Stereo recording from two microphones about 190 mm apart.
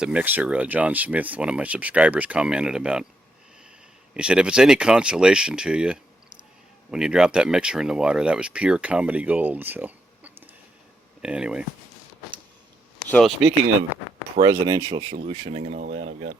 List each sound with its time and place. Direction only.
0.0 s speech: 5° right (ahead or behind)
4.1 s speech: 5° right (ahead or behind)
13.1 s speech: centre (ahead or behind)
14.4 s speech: 20° right (ahead or behind)
15.1 s speech: 35° right (ahead or behind)